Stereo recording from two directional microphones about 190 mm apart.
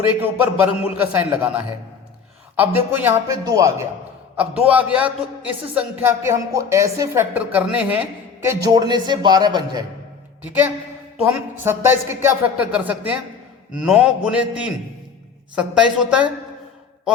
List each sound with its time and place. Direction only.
0.1 s a woman's voice: 10° right (ahead or behind)
8.4 s a man's voice: 20° right (ahead or behind)
10.4 s a woman's voice: 10° right (ahead or behind)